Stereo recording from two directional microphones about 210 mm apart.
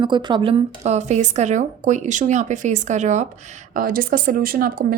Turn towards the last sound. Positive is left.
turn(degrees=-45)  # may be behind; listen again after turning